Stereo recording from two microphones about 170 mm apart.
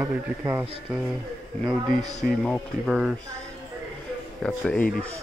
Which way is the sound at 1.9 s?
40° left (ahead or behind).